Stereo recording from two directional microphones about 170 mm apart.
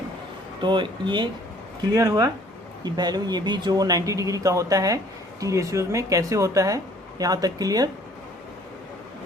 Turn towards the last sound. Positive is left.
turn(degrees=-20)  # may be behind; listen again after turning